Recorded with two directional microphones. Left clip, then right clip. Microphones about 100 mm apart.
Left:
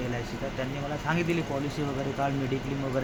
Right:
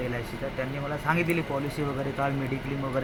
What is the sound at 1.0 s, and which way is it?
Speech, centre (ahead or behind).